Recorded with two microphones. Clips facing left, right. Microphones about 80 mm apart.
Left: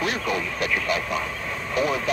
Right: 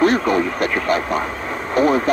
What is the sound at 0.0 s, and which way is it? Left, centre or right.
Speech, right.